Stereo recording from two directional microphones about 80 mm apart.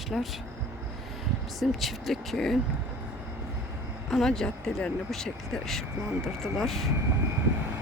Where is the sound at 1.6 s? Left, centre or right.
Centre.